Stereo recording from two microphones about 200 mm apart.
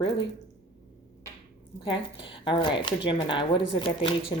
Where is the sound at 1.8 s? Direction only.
25° left (ahead or behind).